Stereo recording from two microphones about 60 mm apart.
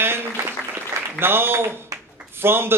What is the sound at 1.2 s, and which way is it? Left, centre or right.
A man's voice, right.